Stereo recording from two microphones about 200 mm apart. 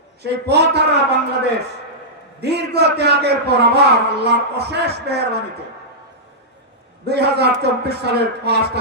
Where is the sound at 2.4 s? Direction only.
55° right (ahead or behind).